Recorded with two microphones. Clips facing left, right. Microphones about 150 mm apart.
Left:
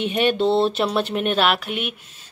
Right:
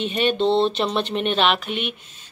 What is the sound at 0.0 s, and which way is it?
Speech, 10° left (ahead or behind).